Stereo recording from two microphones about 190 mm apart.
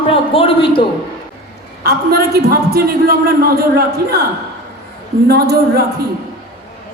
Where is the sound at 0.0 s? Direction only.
30° left (ahead or behind).